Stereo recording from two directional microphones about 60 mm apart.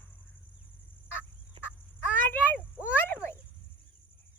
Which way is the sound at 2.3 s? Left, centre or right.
Left.